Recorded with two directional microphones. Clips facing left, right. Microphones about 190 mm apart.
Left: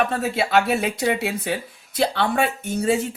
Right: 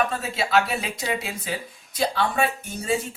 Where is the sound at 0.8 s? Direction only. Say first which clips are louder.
Left 7 dB; 60° left (ahead or behind).